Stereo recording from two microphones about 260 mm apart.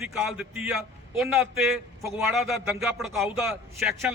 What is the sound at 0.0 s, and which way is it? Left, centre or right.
A man's voice, centre.